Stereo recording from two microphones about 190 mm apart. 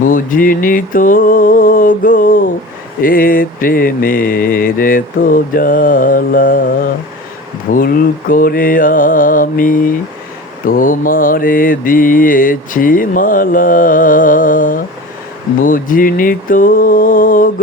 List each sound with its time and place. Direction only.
0.0 s mantra: 45° left (ahead or behind)
7.7 s mantra: 50° left (ahead or behind)